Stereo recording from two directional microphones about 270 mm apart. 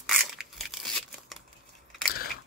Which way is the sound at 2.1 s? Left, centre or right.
Left.